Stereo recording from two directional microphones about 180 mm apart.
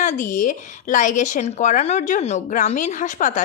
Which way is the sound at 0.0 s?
45° left (ahead or behind).